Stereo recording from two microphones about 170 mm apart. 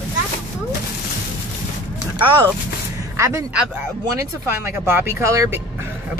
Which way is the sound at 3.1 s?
15° right (ahead or behind).